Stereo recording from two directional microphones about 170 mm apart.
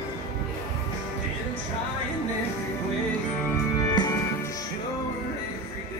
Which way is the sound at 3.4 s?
20° left (ahead or behind).